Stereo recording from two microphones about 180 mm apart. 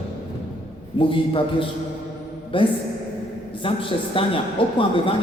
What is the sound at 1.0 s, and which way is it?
A man's voice, 30° left (ahead or behind).